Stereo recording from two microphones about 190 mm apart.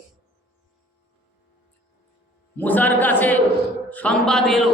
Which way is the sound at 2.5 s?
10° left (ahead or behind).